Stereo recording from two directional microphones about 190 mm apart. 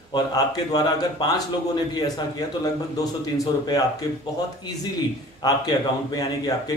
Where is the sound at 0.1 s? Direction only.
20° left (ahead or behind).